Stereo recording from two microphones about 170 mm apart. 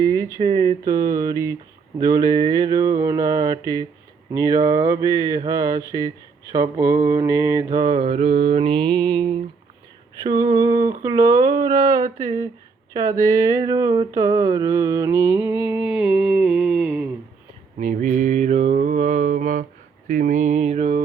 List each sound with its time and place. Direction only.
0.0 s a sound: 25° right (ahead or behind)
0.3 s mantra: 30° right (ahead or behind)
15.7 s music: 5° right (ahead or behind)
17.7 s mantra: 45° right (ahead or behind)